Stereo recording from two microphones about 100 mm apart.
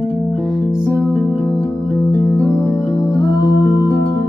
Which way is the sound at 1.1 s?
15° left (ahead or behind).